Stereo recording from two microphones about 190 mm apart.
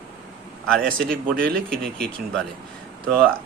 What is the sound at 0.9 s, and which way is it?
Speech, 50° right (ahead or behind).